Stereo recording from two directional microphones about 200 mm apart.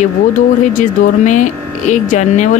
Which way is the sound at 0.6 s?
40° left (ahead or behind).